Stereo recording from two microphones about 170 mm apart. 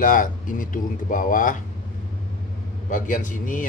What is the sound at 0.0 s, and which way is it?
A man's voice, 50° left (ahead or behind).